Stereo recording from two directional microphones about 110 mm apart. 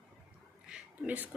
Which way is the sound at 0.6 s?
10° right (ahead or behind).